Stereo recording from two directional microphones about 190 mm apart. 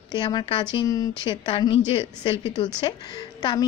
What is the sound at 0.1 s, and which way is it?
A woman's voice, 20° left (ahead or behind).